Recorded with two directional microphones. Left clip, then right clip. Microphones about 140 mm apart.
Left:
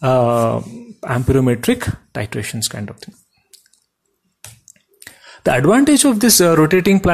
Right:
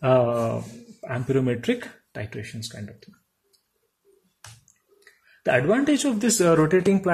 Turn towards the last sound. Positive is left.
turn(degrees=25)  # may be behind; listen again after turning